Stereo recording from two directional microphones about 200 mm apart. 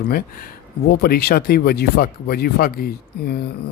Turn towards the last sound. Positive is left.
turn(degrees=50)  # may be behind; listen again after turning